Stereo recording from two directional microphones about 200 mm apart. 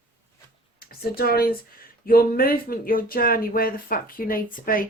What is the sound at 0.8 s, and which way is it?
Speech, 50° left (ahead or behind).